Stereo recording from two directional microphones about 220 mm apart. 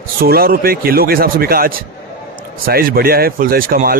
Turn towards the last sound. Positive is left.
turn(degrees=-40)  # may be behind; listen again after turning